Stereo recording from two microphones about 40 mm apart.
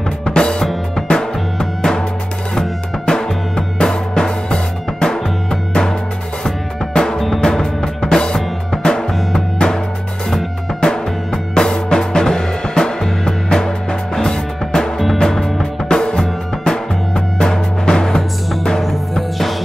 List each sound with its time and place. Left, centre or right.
0.2 s music: left
18.8 s music: centre